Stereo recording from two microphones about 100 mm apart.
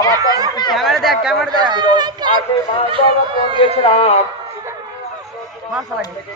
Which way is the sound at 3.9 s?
90° left.